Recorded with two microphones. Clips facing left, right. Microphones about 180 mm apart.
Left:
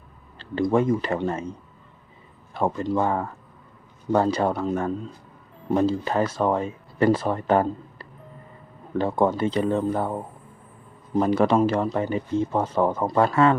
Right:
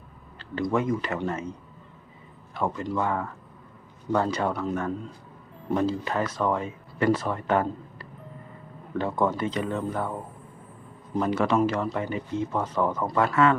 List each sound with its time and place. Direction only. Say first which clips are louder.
0.3 s speech: left 5 dB; 30° left (ahead or behind)
2.5 s speech: left 4 dB; 30° left (ahead or behind)
11.2 s speech: left 4 dB; 35° left (ahead or behind)